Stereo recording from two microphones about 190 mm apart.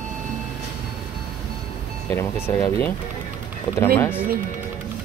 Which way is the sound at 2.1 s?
10° left (ahead or behind).